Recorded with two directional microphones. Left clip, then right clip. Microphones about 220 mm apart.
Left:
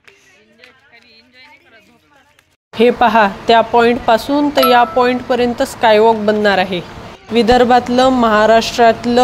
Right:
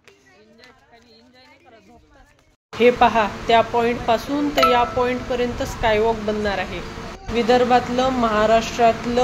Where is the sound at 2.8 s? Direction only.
35° left (ahead or behind).